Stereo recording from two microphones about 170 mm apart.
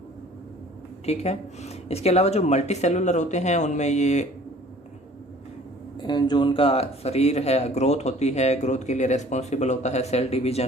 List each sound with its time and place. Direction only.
1.0 s a man's voice: 40° left (ahead or behind)
6.0 s a man's voice: 25° left (ahead or behind)